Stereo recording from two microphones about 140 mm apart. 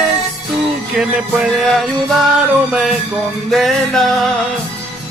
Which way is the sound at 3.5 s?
Centre (ahead or behind).